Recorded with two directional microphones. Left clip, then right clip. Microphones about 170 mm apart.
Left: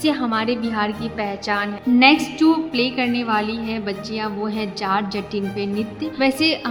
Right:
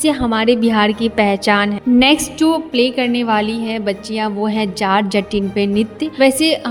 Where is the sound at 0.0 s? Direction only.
30° right (ahead or behind).